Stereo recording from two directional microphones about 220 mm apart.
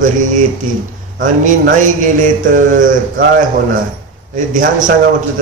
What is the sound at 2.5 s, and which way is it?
Speech, 35° right (ahead or behind).